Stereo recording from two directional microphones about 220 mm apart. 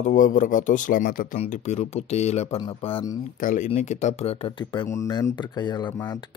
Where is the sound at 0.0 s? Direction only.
35° left (ahead or behind).